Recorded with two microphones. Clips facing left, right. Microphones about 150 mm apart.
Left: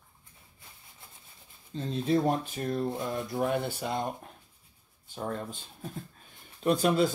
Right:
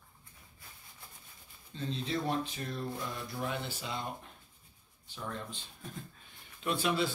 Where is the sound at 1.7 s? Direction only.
45° left (ahead or behind).